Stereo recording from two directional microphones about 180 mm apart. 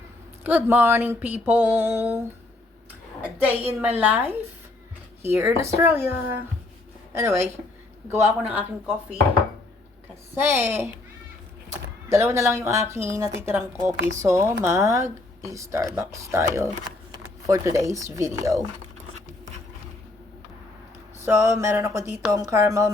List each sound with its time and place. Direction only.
0.4 s speech: 10° right (ahead or behind)
10.5 s speech: 15° right (ahead or behind)
12.0 s speech: 15° right (ahead or behind)
21.2 s speech: 15° right (ahead or behind)